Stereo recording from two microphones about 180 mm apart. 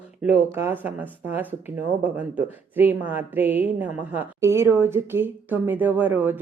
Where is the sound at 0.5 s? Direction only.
10° right (ahead or behind).